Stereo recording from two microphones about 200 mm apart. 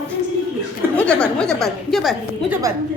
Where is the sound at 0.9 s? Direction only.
5° left (ahead or behind).